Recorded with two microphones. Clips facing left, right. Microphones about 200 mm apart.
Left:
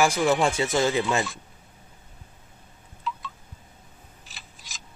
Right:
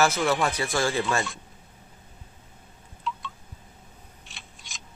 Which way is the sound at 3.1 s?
Centre (ahead or behind).